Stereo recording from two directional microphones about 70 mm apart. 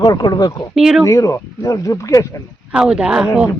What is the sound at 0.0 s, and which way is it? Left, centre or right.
Speech, left.